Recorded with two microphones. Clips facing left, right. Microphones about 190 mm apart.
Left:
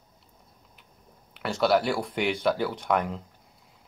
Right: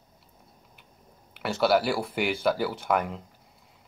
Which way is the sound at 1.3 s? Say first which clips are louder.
Even; centre (ahead or behind).